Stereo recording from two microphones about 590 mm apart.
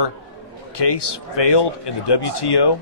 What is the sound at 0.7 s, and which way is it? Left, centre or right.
A man's voice, left.